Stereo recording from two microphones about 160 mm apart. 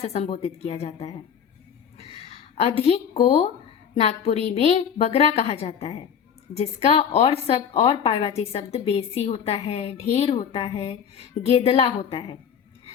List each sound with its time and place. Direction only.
0.0 s a woman's voice: 40° left (ahead or behind)
2.0 s a sound: 40° left (ahead or behind)
3.9 s a woman's voice: 40° left (ahead or behind)